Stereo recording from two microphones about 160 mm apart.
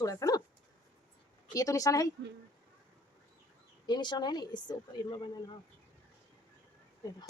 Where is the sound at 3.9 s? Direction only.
25° left (ahead or behind).